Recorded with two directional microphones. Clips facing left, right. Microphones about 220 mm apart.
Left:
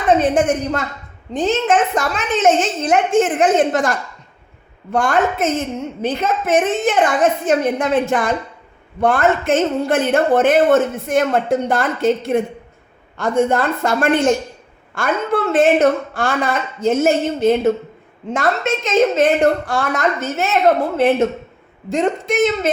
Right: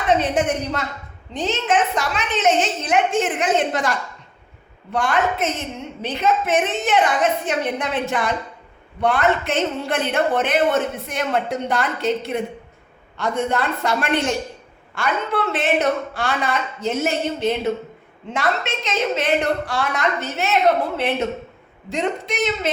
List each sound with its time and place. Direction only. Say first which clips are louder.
0.2 s a woman's voice: left 5 dB; 50° left (ahead or behind)